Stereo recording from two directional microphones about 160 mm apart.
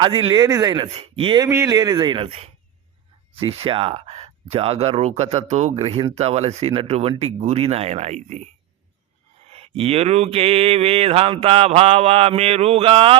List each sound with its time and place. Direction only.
0.0 s mantra: 35° right (ahead or behind)
0.4 s speech: 20° right (ahead or behind)
0.9 s mantra: 40° right (ahead or behind)
1.5 s speech: 20° right (ahead or behind); by 2.5 s 35° right (ahead or behind)
3.4 s mantra: 35° right (ahead or behind)
9.5 s mantra: 35° right (ahead or behind)